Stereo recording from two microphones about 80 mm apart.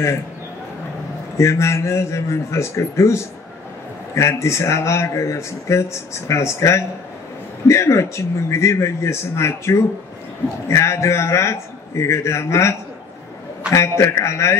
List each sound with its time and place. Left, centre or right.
1.4 s speech: left